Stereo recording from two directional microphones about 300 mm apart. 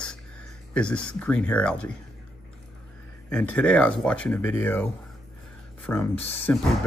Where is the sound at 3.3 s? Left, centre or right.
Centre.